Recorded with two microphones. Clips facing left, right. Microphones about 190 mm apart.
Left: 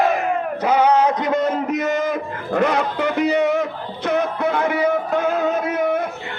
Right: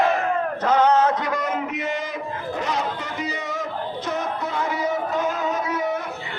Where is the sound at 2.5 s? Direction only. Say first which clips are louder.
Left 8 dB; 60° left (ahead or behind).